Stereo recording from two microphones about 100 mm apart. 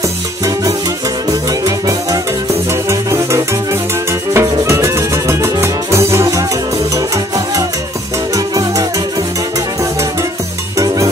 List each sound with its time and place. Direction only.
1.6 s music: 35° right (ahead or behind)
8.4 s music: 35° right (ahead or behind)